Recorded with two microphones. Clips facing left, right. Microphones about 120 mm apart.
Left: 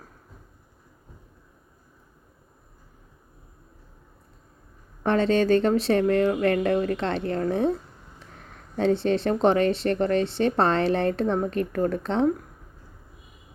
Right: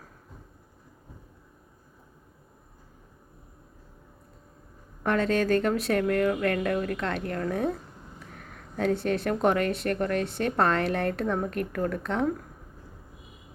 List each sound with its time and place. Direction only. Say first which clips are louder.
5.0 s speech: left 4 dB; 25° left (ahead or behind)
8.7 s speech: left 4 dB; 25° left (ahead or behind)